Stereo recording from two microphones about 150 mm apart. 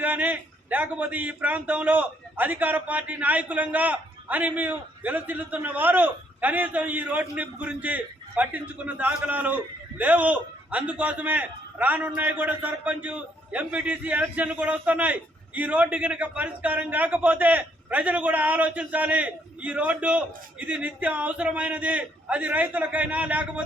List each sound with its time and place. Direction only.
0.0 s a man's voice: 10° right (ahead or behind)